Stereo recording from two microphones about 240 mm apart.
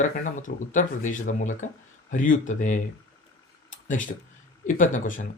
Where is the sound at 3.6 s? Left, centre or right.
Left.